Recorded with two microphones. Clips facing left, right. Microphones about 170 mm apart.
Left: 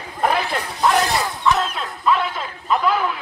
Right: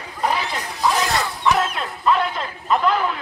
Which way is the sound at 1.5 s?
Centre (ahead or behind).